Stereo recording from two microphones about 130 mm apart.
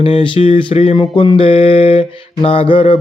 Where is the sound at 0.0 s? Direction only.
40° left (ahead or behind).